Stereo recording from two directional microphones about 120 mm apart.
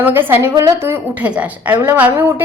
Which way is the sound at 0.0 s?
15° right (ahead or behind).